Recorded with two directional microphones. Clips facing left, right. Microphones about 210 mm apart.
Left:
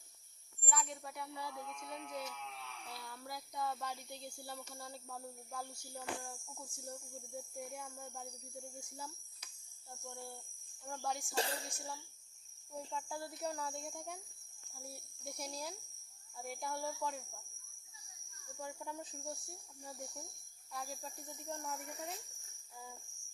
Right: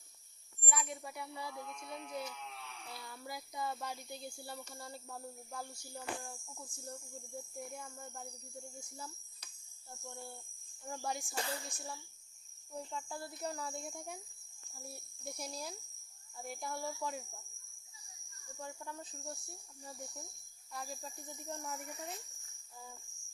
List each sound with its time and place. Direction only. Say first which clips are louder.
0.7 s speech: even; 5° right (ahead or behind)
9.9 s speech: even; centre (ahead or behind)
11.3 s speech: left 5 dB; 30° left (ahead or behind)
12.7 s speech: even; centre (ahead or behind)
18.6 s speech: left 1 dB; 10° left (ahead or behind)
20.7 s speech: even; centre (ahead or behind)